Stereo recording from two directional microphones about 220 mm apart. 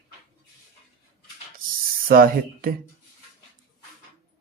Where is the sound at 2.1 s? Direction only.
40° right (ahead or behind).